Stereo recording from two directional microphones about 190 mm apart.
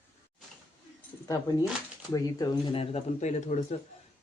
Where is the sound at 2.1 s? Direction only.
15° left (ahead or behind).